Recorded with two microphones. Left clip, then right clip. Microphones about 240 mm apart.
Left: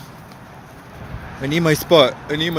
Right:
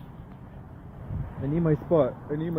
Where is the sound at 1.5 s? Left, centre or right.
Left.